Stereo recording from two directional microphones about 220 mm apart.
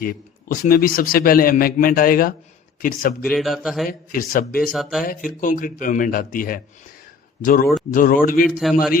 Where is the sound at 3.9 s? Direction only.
40° left (ahead or behind).